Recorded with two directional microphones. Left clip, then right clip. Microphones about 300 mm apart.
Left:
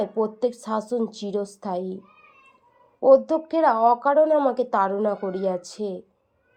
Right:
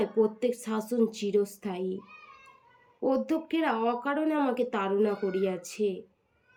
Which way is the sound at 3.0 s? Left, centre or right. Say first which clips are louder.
Left 12 dB; centre.